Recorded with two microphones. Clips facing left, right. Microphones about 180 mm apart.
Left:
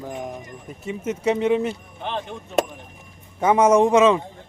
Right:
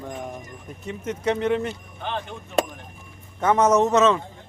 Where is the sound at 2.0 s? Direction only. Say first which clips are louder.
Left 1 dB; 25° left (ahead or behind).